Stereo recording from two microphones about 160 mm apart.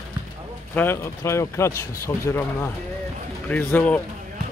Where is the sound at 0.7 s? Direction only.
15° left (ahead or behind).